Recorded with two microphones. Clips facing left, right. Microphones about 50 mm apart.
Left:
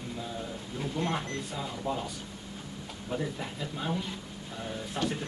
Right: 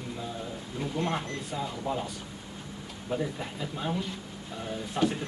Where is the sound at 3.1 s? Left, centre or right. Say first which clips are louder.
Right 2 dB; centre.